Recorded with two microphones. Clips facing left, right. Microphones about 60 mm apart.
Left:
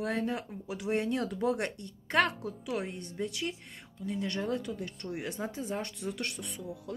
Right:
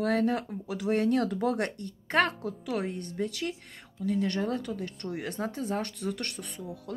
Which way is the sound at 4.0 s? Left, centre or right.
Right.